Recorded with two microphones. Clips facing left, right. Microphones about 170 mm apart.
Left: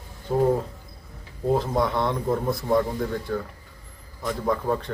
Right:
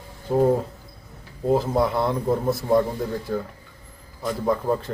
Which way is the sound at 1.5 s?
5° right (ahead or behind).